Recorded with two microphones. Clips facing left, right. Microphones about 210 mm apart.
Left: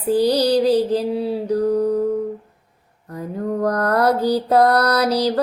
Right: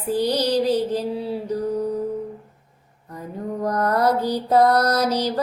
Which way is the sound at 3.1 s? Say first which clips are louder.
Left 5 dB; 65° left (ahead or behind).